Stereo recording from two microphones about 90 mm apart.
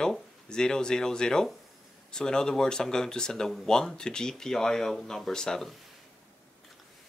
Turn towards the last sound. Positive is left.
turn(degrees=5)  # may be behind; listen again after turning